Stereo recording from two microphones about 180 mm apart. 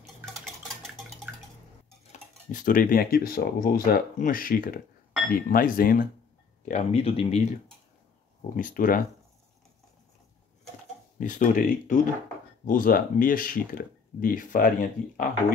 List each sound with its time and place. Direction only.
2.1 s speech: 45° left (ahead or behind)
6.6 s speech: 40° left (ahead or behind)
8.5 s speech: 50° left (ahead or behind)
11.1 s speech: 45° left (ahead or behind)